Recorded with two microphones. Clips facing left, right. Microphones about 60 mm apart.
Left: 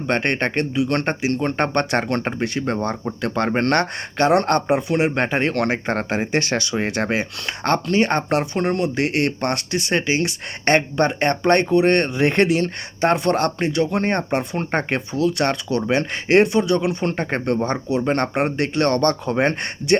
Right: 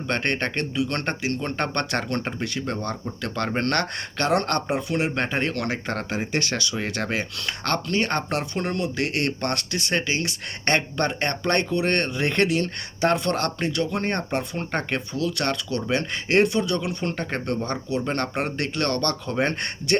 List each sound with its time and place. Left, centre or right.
0.1 s speech: left
2.0 s speech: left
13.1 s speech: left
17.0 s speech: left